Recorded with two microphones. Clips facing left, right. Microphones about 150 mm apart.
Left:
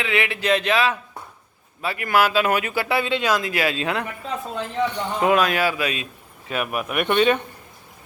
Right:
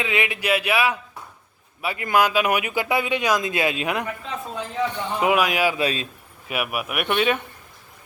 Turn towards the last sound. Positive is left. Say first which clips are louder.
# left 3 dB
turn(degrees=-5)  # may be behind; listen again after turning